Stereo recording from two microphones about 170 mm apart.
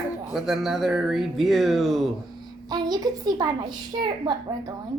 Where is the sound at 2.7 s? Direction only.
25° right (ahead or behind).